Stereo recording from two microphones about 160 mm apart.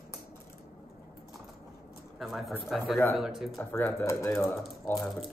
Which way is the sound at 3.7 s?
15° left (ahead or behind).